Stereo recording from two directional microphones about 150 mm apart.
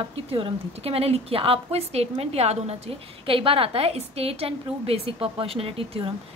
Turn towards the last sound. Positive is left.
turn(degrees=-40)  # may be behind; listen again after turning